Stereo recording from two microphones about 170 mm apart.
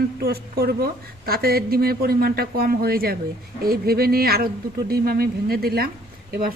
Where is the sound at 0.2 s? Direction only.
65° right (ahead or behind).